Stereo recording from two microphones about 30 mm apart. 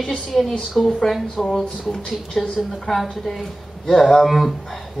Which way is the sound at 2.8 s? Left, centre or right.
Centre.